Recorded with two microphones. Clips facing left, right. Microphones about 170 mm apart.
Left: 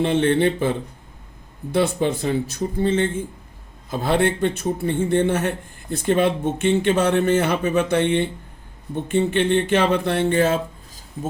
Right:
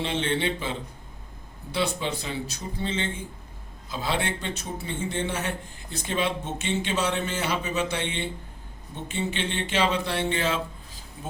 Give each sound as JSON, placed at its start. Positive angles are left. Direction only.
{"t": 0.0, "sound": "a man's voice", "side_deg": 50}